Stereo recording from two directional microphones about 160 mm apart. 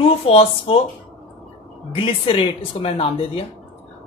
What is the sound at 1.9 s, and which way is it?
Speech, 35° left (ahead or behind).